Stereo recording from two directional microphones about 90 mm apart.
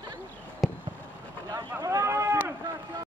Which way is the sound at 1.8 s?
35° right (ahead or behind).